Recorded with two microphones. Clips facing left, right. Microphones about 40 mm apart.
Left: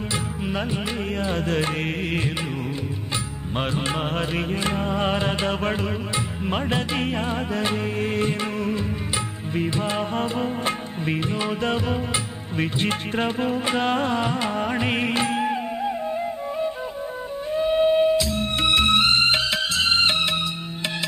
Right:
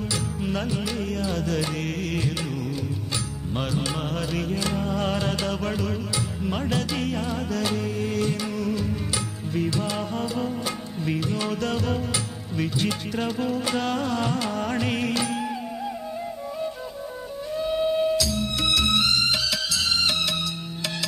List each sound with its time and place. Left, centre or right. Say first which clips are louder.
0.5 s music: left 1 dB; left
3.5 s music: left 3 dB; left
12.5 s music: left 2 dB; left